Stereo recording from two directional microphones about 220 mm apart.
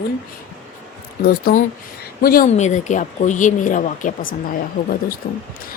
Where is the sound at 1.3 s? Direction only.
40° left (ahead or behind).